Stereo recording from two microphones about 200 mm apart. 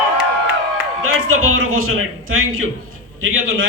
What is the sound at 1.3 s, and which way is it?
A man's voice, 90° right.